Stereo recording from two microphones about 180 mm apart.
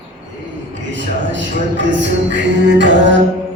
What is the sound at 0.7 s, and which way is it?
Speech, 90° right.